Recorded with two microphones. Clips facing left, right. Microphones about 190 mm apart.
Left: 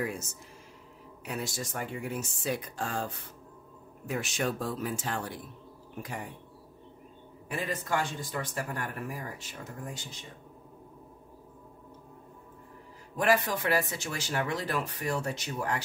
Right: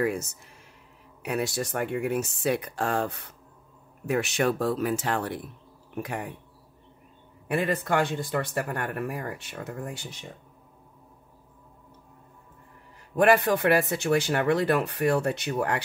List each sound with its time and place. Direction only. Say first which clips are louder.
0.0 s a man's voice: right 7 dB; 65° right (ahead or behind)
7.4 s a man's voice: right 8 dB; 65° right (ahead or behind)
13.1 s a man's voice: right 6 dB; 60° right (ahead or behind)